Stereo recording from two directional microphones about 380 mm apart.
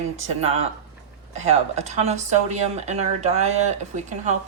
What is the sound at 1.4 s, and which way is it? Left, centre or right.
Speech, centre.